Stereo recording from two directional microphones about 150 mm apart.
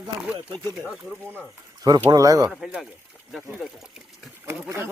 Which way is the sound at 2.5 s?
Centre (ahead or behind).